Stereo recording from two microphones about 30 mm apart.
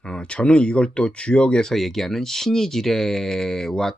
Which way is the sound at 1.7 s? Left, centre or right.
Centre.